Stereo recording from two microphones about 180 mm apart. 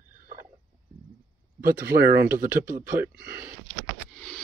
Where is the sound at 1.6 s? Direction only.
60° right (ahead or behind).